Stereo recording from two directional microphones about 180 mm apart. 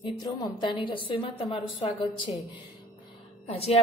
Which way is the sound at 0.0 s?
25° left (ahead or behind).